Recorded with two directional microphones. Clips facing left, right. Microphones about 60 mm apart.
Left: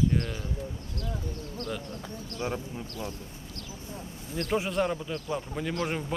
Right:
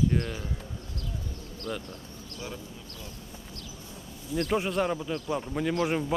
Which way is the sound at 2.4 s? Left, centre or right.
Left.